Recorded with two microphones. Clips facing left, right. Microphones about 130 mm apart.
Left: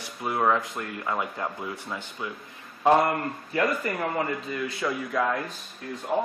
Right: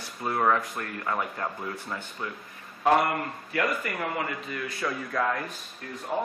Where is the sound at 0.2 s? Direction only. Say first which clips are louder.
Left 1 dB; 5° left (ahead or behind).